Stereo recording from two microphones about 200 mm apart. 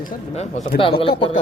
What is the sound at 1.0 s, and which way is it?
Speech, 25° left (ahead or behind).